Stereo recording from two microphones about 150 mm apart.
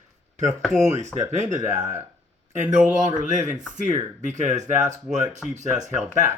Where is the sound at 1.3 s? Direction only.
50° right (ahead or behind).